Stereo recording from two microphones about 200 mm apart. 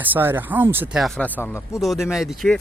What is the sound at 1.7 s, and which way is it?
Speech, centre (ahead or behind).